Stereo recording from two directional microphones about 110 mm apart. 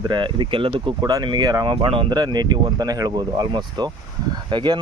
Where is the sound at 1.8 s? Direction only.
55° right (ahead or behind).